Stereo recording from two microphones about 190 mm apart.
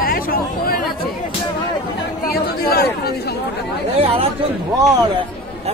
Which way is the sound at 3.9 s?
30° right (ahead or behind).